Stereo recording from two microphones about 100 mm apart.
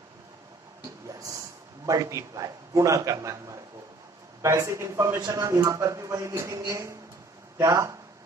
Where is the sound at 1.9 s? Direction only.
35° right (ahead or behind).